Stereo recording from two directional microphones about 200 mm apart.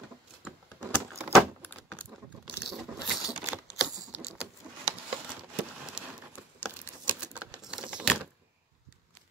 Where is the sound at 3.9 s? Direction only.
15° right (ahead or behind).